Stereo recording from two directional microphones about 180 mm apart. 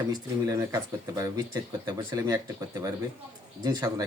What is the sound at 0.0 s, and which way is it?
Speech, 20° right (ahead or behind).